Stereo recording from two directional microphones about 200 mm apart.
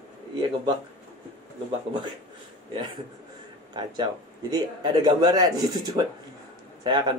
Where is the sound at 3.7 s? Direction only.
20° right (ahead or behind).